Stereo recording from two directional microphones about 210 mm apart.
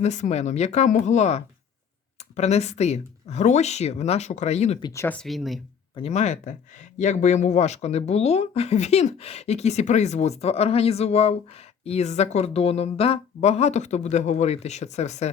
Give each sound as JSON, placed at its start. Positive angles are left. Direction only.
{"t": 0.0, "sound": "speech", "side_deg": 35}
{"t": 4.8, "sound": "speech", "side_deg": 15}
{"t": 6.0, "sound": "speech", "side_deg": 35}